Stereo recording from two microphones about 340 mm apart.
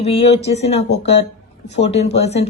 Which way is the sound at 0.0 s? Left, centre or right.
Centre.